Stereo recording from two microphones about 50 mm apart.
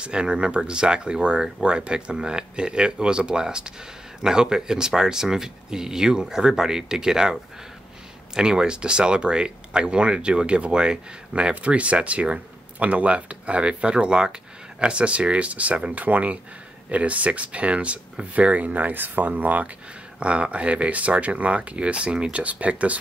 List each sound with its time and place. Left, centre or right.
0.0 s speech: centre
8.4 s speech: centre; by 19.7 s right
20.2 s speech: right